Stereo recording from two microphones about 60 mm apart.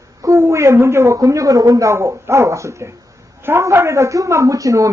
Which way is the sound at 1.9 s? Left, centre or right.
Right.